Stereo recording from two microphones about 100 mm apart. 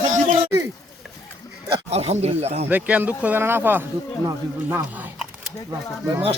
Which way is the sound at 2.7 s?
15° right (ahead or behind).